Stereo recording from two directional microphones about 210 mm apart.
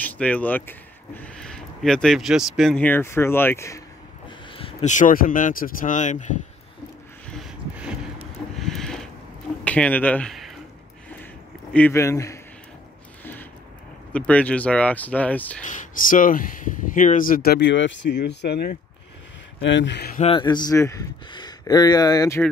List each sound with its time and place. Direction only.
0.0 s speech: 5° left (ahead or behind)
4.3 s speech: 25° left (ahead or behind)
7.2 s a sound: centre (ahead or behind)
9.7 s speech: 5° left (ahead or behind)
11.7 s speech: 10° left (ahead or behind)
13.2 s a sound: 10° left (ahead or behind)
14.1 s speech: 5° left (ahead or behind)
15.6 s speech: 35° left (ahead or behind); by 20.2 s 55° left (ahead or behind)
20.2 s speech: 25° left (ahead or behind)